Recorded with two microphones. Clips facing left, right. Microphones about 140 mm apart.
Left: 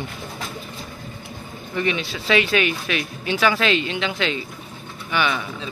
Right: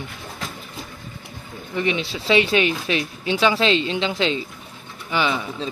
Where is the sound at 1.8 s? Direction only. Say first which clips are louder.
Right 1 dB; 20° right (ahead or behind).